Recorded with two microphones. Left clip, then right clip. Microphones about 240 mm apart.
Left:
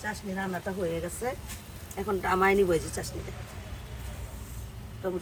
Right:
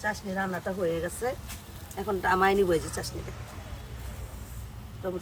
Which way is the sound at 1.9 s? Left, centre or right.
Centre.